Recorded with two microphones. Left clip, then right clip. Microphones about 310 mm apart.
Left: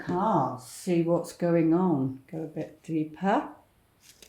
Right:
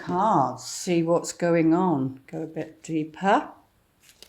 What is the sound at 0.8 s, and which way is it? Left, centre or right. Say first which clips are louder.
Speech: right 3 dB; right.